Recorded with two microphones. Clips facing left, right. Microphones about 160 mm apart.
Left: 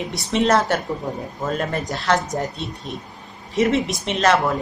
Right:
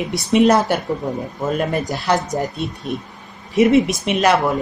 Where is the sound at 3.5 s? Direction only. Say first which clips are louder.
Right 6 dB; 15° right (ahead or behind).